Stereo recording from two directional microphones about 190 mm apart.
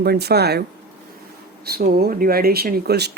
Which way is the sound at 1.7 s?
55° right (ahead or behind).